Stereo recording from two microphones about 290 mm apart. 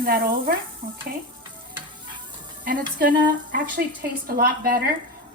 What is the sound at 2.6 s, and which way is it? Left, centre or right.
Speech, right.